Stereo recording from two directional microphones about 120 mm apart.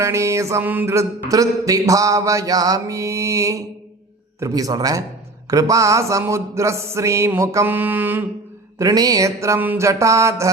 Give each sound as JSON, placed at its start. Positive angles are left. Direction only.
{"t": 0.0, "sound": "mantra", "side_deg": -25}
{"t": 8.8, "sound": "mantra", "side_deg": -30}